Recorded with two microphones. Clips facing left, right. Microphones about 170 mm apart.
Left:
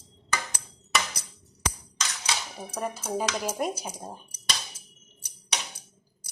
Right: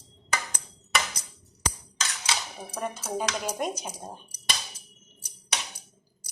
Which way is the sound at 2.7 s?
5° left (ahead or behind).